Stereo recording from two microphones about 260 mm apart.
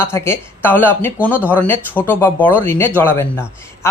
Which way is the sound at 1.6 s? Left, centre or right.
Centre.